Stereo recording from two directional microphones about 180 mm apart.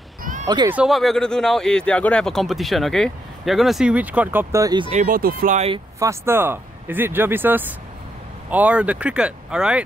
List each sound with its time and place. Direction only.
0.2 s a sound: 45° right (ahead or behind)
0.7 s speech: 5° right (ahead or behind); by 4.9 s 25° right (ahead or behind)
4.9 s speech: 50° right (ahead or behind)
5.9 s speech: 15° right (ahead or behind)